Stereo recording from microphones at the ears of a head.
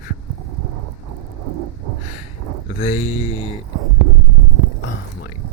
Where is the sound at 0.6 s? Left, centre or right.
Right.